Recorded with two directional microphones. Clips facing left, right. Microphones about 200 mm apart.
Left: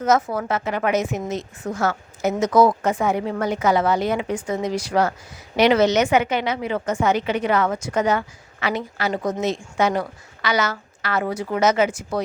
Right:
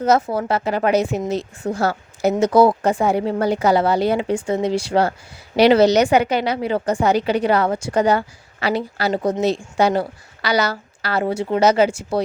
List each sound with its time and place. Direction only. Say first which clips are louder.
0.3 s speech: right 3 dB; 35° right (ahead or behind)